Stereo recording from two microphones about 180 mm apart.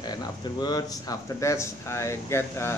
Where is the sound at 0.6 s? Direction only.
20° left (ahead or behind).